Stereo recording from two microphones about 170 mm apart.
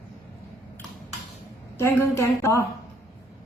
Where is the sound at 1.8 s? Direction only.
15° left (ahead or behind).